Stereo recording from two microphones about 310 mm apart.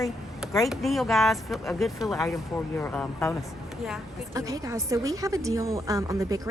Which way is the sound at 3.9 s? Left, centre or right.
Centre.